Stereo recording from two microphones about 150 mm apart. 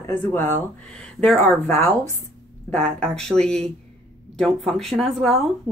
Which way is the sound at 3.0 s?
5° left (ahead or behind).